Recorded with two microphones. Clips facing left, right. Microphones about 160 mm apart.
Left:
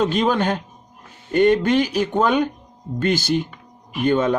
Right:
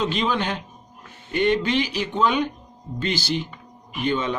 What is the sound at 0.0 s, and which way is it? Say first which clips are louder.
A man's voice: left 5 dB; 45° left (ahead or behind).